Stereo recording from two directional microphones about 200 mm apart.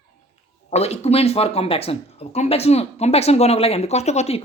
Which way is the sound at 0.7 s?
30° left (ahead or behind).